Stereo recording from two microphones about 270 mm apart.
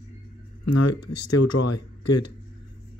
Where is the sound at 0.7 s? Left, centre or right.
Left.